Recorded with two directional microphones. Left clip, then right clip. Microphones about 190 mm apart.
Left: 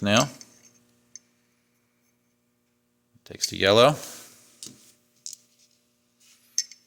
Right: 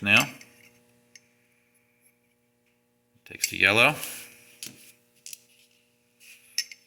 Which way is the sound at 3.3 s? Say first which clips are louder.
Left 1 dB; 65° left (ahead or behind).